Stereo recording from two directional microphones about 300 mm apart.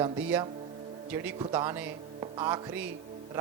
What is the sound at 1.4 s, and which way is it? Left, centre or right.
A man's voice, centre.